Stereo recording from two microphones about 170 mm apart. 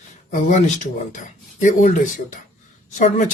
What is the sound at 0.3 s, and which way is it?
A woman's voice, 40° left (ahead or behind).